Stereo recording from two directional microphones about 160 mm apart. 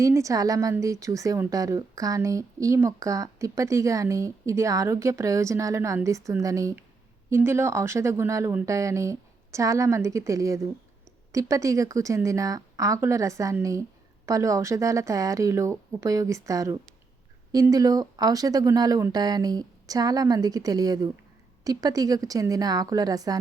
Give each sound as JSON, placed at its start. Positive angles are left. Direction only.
{"t": 0.0, "sound": "a woman's voice", "side_deg": -20}